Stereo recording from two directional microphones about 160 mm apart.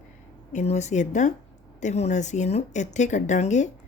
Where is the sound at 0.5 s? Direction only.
45° left (ahead or behind).